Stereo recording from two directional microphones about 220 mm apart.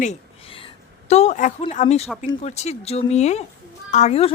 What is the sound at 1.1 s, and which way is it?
Speech, 30° left (ahead or behind).